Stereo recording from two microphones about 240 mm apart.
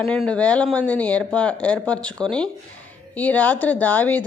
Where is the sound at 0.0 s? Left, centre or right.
Centre.